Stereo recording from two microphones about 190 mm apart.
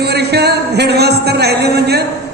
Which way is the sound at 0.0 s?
60° right (ahead or behind).